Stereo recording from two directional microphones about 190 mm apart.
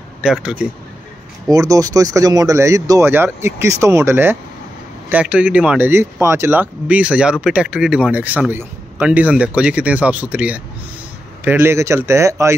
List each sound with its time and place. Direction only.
0.2 s speech: 5° right (ahead or behind)
1.5 s a man's voice: 20° right (ahead or behind)